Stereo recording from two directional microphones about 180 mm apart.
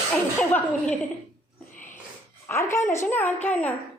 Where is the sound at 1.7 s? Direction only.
45° left (ahead or behind).